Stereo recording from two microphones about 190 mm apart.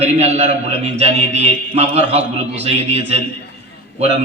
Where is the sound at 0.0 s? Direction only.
35° right (ahead or behind).